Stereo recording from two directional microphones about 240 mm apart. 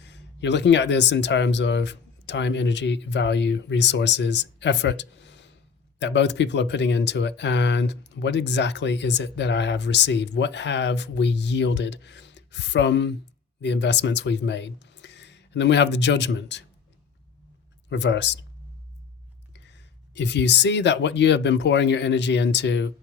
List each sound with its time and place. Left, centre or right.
0.0 s speech: left
17.8 s speech: left
19.5 s speech: left